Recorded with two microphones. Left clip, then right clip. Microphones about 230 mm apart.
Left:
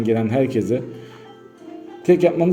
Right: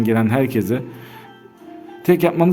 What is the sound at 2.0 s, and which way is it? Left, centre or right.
Speech, right.